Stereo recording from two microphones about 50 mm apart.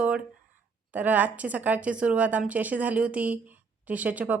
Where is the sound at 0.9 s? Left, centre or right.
Right.